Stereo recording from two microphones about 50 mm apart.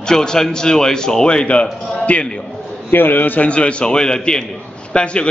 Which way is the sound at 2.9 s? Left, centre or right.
Left.